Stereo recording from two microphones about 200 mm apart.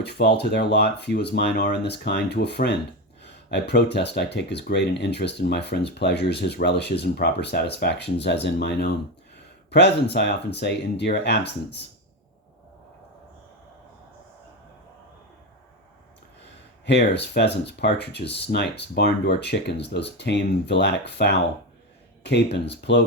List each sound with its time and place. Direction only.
0.0 s speech: 55° left (ahead or behind)
16.8 s speech: 60° left (ahead or behind)